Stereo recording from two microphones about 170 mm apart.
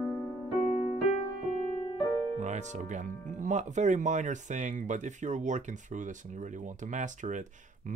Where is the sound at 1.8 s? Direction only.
30° left (ahead or behind).